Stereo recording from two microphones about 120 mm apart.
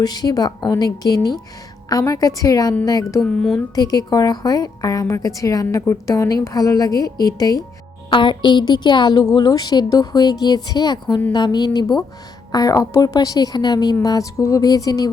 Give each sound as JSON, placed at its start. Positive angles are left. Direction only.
{"t": 0.0, "sound": "a woman's voice", "side_deg": 35}
{"t": 3.2, "sound": "speech", "side_deg": 0}
{"t": 3.8, "sound": "a woman's voice", "side_deg": 30}